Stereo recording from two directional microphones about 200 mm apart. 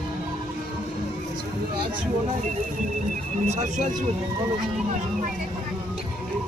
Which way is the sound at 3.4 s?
35° right (ahead or behind).